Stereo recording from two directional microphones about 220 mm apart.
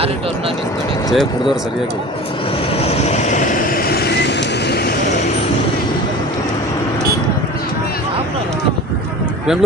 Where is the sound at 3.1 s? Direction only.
30° left (ahead or behind).